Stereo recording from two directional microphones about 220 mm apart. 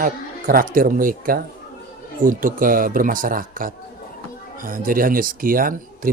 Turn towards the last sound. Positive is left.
turn(degrees=-40)  # may be behind; listen again after turning